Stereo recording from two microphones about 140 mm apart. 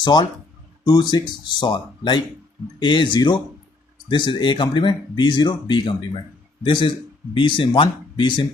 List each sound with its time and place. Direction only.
0.0 s speech: 30° left (ahead or behind)